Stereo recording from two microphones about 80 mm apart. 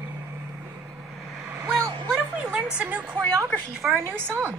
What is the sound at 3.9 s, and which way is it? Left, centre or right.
Speech, right.